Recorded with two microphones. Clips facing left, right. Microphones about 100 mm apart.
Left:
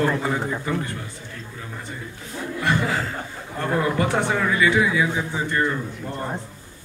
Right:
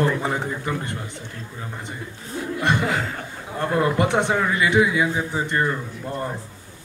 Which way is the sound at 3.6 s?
20° right (ahead or behind).